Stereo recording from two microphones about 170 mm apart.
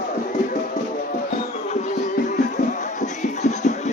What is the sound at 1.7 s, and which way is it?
Music, 45° left (ahead or behind).